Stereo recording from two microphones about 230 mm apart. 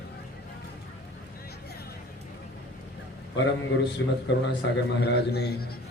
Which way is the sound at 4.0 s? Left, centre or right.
Left.